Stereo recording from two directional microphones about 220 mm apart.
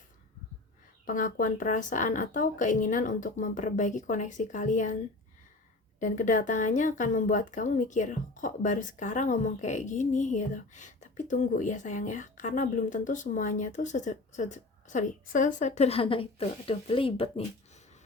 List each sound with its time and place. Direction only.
1.0 s a woman's voice: 35° left (ahead or behind)
6.0 s a woman's voice: 35° left (ahead or behind)